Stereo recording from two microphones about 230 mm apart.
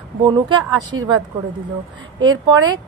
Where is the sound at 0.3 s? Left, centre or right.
Centre.